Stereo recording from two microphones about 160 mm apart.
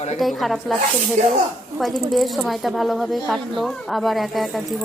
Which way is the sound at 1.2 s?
50° right (ahead or behind).